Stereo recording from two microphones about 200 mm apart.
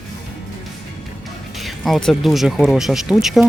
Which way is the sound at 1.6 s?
Centre (ahead or behind).